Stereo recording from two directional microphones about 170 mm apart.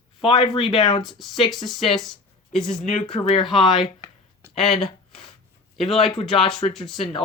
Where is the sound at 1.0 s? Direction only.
Centre (ahead or behind).